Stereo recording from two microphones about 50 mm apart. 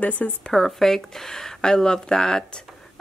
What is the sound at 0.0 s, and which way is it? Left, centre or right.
Speech, left.